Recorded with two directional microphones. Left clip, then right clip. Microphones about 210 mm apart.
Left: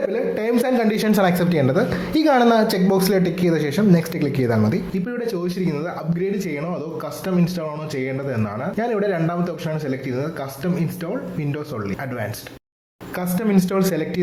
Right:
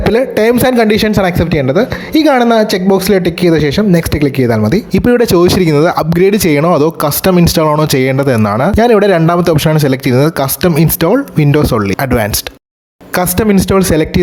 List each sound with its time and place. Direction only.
0.1 s speech: 45° right (ahead or behind)
4.9 s speech: 50° right (ahead or behind)